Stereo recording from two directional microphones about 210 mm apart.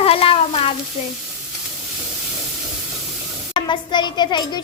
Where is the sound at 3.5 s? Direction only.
25° left (ahead or behind).